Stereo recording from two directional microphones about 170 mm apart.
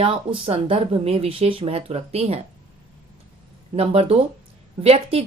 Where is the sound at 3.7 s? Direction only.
35° right (ahead or behind).